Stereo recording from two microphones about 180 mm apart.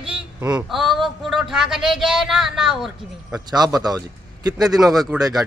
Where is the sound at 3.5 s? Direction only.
20° right (ahead or behind).